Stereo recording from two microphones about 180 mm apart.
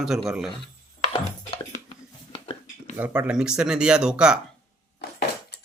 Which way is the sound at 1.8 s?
30° left (ahead or behind).